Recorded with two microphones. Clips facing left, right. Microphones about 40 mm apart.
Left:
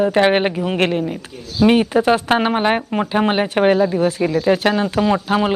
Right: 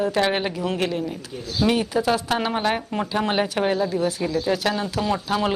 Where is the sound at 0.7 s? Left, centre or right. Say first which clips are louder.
Left 9 dB; left.